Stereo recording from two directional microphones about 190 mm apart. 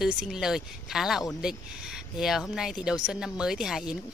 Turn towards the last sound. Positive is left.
turn(degrees=-5)  # may be behind; listen again after turning